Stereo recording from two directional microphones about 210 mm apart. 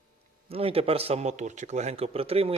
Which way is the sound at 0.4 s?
25° right (ahead or behind).